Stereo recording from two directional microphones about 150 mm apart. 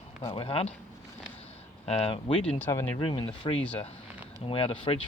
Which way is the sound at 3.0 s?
35° left (ahead or behind).